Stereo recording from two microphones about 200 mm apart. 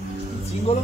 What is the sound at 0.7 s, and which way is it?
Speech, 30° left (ahead or behind).